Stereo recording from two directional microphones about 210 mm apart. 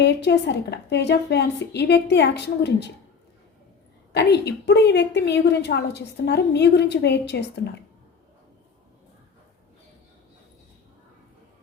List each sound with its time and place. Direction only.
0.0 s a woman's voice: 55° left (ahead or behind)
4.1 s a woman's voice: 55° left (ahead or behind)